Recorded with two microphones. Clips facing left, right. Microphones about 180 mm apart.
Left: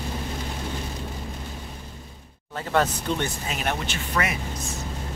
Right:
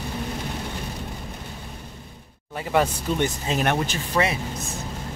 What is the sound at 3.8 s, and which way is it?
Speech, 35° right (ahead or behind).